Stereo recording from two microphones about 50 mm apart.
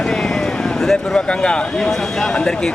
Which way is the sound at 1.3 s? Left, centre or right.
Centre.